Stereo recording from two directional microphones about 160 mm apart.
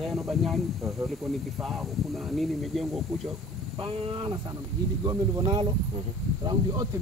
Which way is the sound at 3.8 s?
35° right (ahead or behind).